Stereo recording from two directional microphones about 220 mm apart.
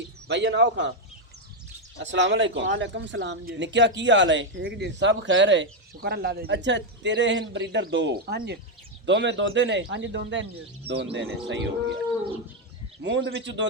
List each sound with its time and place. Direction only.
0.3 s a man's voice: 55° right (ahead or behind)
2.0 s a man's voice: 55° right (ahead or behind)
13.0 s speech: 55° right (ahead or behind)